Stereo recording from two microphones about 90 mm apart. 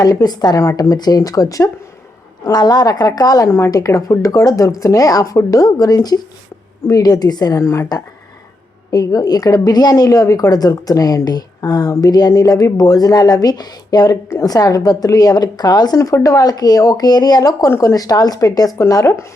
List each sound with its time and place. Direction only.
0.0 s a woman's voice: 45° left (ahead or behind)